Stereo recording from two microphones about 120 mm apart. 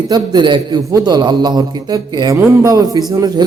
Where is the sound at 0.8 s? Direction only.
30° right (ahead or behind).